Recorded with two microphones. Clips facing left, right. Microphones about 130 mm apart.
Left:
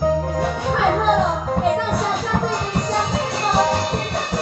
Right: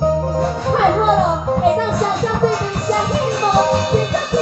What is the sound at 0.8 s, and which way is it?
Music, 10° right (ahead or behind).